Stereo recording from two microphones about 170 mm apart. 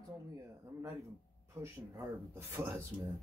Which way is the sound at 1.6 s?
15° right (ahead or behind).